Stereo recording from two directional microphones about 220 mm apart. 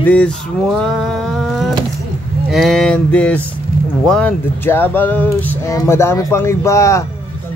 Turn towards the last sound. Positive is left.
turn(degrees=15)  # may be behind; listen again after turning